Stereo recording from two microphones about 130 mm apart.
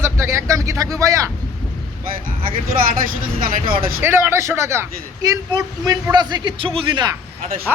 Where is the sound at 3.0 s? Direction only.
90° right.